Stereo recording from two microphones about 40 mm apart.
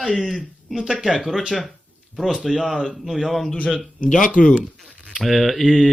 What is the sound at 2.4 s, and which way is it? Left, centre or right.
A man's voice, centre.